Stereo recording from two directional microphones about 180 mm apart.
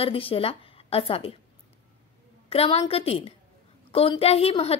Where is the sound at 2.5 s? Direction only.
35° left (ahead or behind).